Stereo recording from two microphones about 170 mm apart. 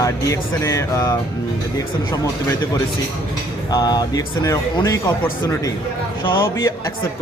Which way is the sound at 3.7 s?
25° left (ahead or behind).